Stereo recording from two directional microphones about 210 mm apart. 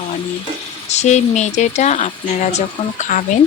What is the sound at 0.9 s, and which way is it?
Speech, 35° left (ahead or behind).